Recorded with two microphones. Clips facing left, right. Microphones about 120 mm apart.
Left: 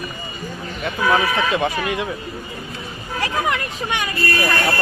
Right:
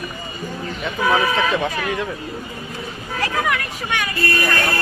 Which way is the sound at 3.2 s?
25° left (ahead or behind).